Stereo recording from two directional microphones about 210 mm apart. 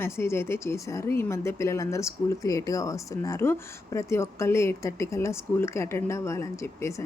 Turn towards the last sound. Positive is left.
turn(degrees=15)  # may be behind; listen again after turning